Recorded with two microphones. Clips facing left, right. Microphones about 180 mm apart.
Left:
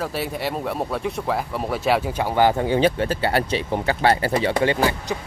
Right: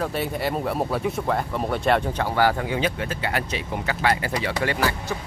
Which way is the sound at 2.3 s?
25° left (ahead or behind).